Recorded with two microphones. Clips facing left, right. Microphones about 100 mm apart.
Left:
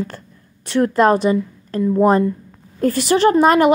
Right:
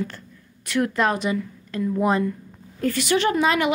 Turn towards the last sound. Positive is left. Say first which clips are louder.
# left 8 dB
turn(degrees=40)  # may be behind; listen again after turning